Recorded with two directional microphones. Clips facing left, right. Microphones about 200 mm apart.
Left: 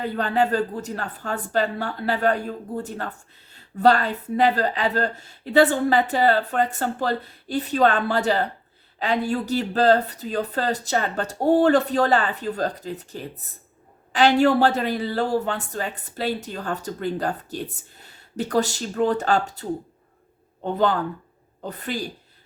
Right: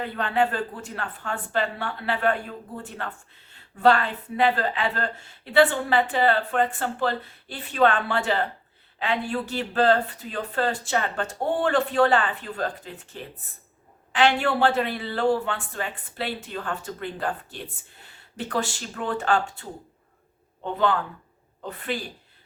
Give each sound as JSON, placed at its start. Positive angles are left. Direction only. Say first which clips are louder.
{"t": 0.0, "sound": "speech", "louder": "left 2 dB", "side_deg": 40}
{"t": 20.7, "sound": "speech", "louder": "left 2 dB", "side_deg": 40}